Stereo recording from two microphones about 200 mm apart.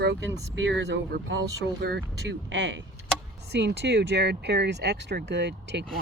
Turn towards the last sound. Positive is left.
turn(degrees=-60)  # may be behind; listen again after turning